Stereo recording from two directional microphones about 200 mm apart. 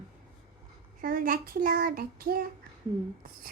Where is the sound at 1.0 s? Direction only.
45° right (ahead or behind).